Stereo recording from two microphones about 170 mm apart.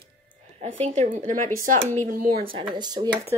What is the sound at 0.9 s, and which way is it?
Speech, 45° right (ahead or behind).